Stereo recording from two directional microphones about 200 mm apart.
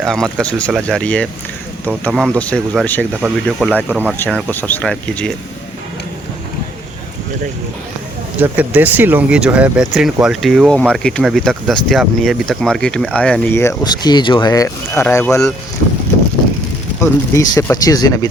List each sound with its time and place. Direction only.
0.0 s speech: centre (ahead or behind)
3.2 s speech: 5° right (ahead or behind)
3.8 s speech: 10° right (ahead or behind)
8.4 s speech: 10° right (ahead or behind); by 15.4 s 10° left (ahead or behind)
17.0 s speech: 15° left (ahead or behind)